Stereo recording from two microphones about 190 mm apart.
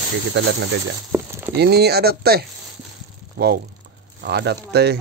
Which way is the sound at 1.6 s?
60° right (ahead or behind).